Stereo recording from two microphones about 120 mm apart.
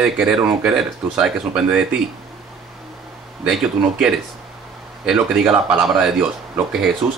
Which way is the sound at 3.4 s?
5° right (ahead or behind).